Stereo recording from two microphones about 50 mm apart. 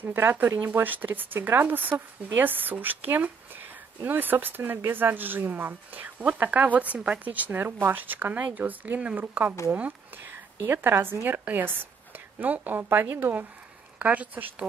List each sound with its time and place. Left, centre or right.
0.0 s a woman's voice: right
10.7 s a woman's voice: right
13.9 s speech: right